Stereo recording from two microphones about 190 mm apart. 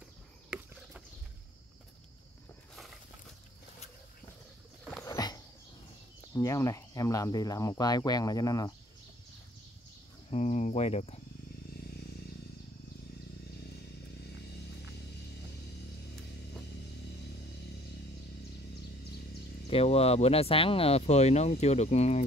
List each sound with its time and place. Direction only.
5.0 s dog: 20° left (ahead or behind)
6.3 s speech: 15° left (ahead or behind)
10.3 s speech: 35° left (ahead or behind)
19.7 s speech: 30° left (ahead or behind)